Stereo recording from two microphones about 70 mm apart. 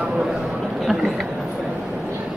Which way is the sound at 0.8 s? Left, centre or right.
Centre.